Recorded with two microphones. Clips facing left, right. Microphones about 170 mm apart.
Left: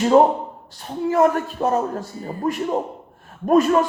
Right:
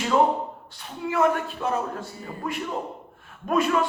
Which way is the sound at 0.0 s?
40° left (ahead or behind).